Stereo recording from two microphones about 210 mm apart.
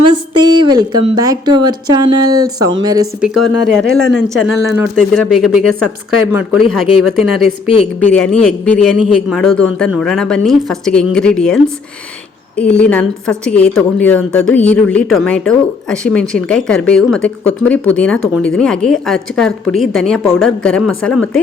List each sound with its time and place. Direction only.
0.1 s a woman's voice: 20° right (ahead or behind)
3.2 s a woman's voice: centre (ahead or behind)
4.4 s speech: 10° right (ahead or behind)
4.9 s a woman's voice: centre (ahead or behind)